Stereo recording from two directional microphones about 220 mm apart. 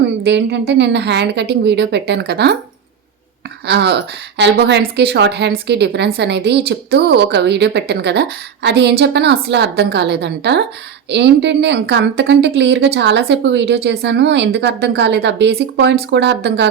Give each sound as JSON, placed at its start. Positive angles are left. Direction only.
{"t": 0.0, "sound": "speech", "side_deg": -50}
{"t": 3.7, "sound": "speech", "side_deg": -50}